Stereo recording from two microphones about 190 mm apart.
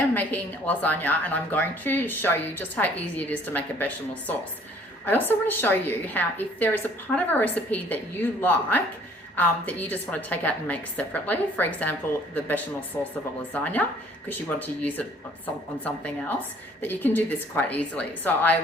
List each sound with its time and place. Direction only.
0.1 s a woman's voice: 10° left (ahead or behind)
16.8 s a woman's voice: 10° left (ahead or behind)